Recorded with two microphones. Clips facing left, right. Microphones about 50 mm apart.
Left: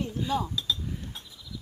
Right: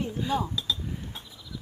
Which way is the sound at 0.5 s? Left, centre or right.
Centre.